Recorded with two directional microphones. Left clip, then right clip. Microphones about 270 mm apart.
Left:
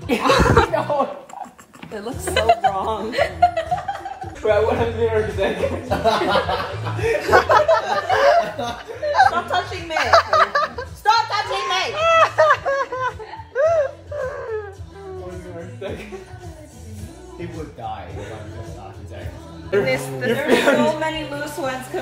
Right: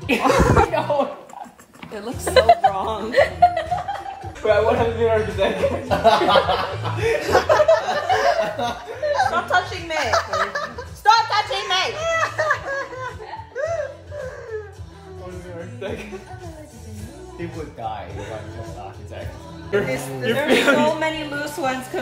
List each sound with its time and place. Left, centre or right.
0.1 s chuckle: centre
1.9 s speech: centre
2.2 s speech: right
2.7 s a man's voice: centre
3.1 s speech: right
4.4 s a sound: centre
13.6 s music: centre
19.9 s a man's voice: centre